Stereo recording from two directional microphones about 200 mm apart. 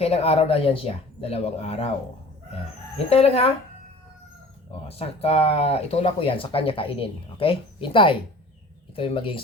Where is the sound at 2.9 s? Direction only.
30° left (ahead or behind).